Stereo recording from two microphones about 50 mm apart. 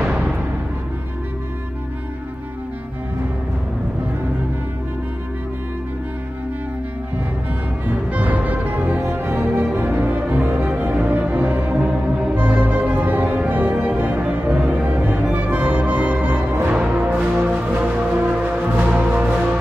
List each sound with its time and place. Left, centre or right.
0.0 s music: right
7.8 s music: right
12.4 s music: right
16.7 s music: right